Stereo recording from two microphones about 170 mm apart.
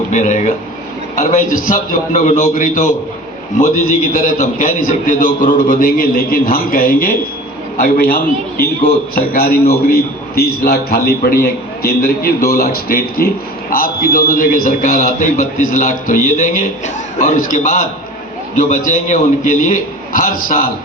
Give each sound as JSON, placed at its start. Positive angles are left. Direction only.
{"t": 0.1, "sound": "a man's voice", "side_deg": 45}